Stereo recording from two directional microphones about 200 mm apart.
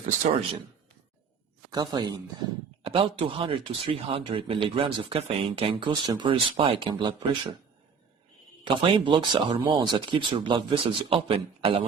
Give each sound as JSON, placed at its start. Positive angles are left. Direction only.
{"t": 1.7, "sound": "speech", "side_deg": -20}
{"t": 8.6, "sound": "speech", "side_deg": -25}